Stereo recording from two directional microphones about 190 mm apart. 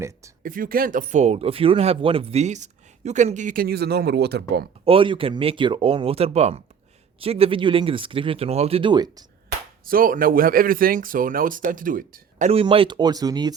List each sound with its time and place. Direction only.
0.4 s speech: 50° right (ahead or behind)
4.9 s speech: 30° right (ahead or behind)
9.8 s speech: 50° right (ahead or behind)
12.5 s speech: 30° right (ahead or behind)